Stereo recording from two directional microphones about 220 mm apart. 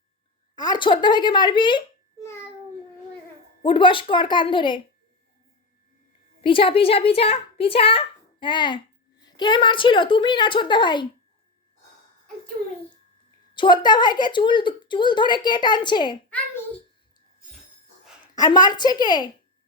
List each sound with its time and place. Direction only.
0.5 s a woman's voice: 20° left (ahead or behind)
3.6 s a woman's voice: 20° left (ahead or behind)
6.4 s a woman's voice: 25° left (ahead or behind)
13.5 s a woman's voice: 20° left (ahead or behind)
18.3 s a woman's voice: 20° left (ahead or behind)